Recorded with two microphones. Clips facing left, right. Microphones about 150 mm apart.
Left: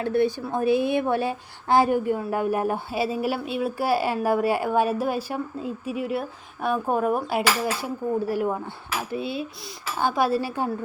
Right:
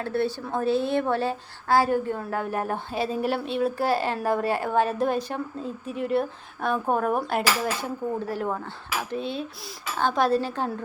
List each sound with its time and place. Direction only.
0.0 s a woman's voice: 15° left (ahead or behind)